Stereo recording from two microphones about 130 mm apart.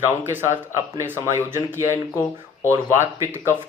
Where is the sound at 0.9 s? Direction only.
20° right (ahead or behind).